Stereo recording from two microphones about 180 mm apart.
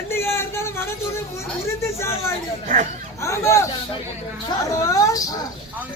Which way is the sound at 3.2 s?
15° left (ahead or behind).